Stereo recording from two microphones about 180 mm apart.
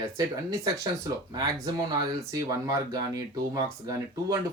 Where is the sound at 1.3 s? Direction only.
20° right (ahead or behind).